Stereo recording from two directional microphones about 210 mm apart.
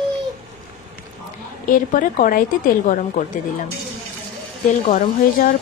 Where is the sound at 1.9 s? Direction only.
40° left (ahead or behind).